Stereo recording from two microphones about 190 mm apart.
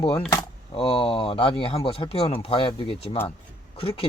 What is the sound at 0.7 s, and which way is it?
Speech, 30° left (ahead or behind).